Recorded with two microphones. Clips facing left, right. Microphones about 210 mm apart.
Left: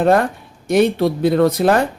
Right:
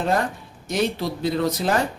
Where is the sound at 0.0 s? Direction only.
60° left (ahead or behind).